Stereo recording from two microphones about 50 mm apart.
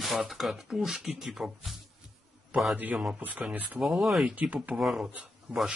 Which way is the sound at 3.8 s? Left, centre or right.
Centre.